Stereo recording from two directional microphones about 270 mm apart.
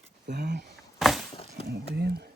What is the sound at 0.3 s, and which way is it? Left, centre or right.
Speech, right.